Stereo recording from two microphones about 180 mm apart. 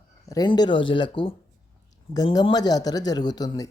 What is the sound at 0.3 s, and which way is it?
Speech, 20° left (ahead or behind).